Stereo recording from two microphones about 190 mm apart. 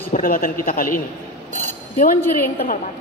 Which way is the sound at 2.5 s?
40° left (ahead or behind).